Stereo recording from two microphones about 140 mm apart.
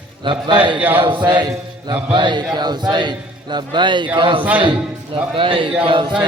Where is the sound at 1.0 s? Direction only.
35° right (ahead or behind).